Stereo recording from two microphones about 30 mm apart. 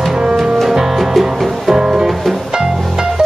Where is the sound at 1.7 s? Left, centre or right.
Right.